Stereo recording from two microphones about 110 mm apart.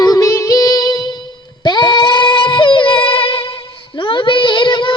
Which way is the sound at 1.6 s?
40° left (ahead or behind).